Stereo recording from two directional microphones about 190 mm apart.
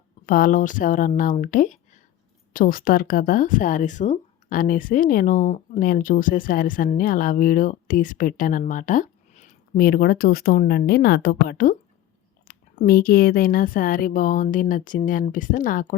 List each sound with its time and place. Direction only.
0.3 s speech: 45° left (ahead or behind)